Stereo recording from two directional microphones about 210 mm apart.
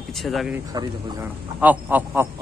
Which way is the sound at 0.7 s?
20° right (ahead or behind).